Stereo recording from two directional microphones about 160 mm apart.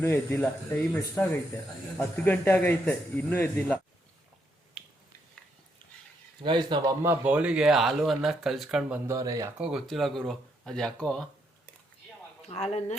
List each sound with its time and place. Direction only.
0.0 s speech: 15° left (ahead or behind)
4.8 s finger snapping: 5° right (ahead or behind)
6.4 s speech: 30° right (ahead or behind)
7.0 s speech: 10° right (ahead or behind)
9.0 s speech: 20° right (ahead or behind)
9.6 s speech: centre (ahead or behind)
12.5 s speech: 45° left (ahead or behind)